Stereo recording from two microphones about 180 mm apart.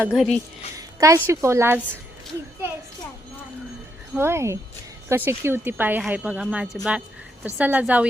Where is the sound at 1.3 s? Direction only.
15° right (ahead or behind).